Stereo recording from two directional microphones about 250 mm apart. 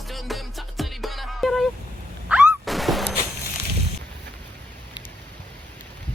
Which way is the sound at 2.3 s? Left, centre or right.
Centre.